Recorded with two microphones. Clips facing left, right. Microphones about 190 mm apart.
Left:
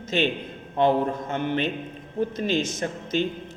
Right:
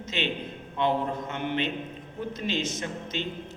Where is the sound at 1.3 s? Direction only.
40° left (ahead or behind).